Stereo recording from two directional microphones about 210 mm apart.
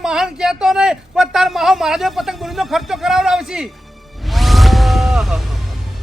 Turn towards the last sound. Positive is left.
turn(degrees=0)  # may be behind; listen again after turning